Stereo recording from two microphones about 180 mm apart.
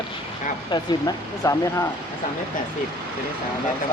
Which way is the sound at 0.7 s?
20° left (ahead or behind).